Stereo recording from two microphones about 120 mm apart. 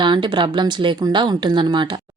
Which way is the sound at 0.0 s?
40° right (ahead or behind).